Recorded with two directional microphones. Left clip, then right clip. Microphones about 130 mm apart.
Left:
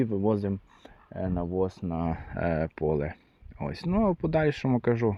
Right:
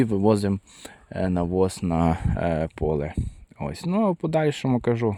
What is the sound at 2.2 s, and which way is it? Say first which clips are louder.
Speech: right 4 dB; 40° right (ahead or behind).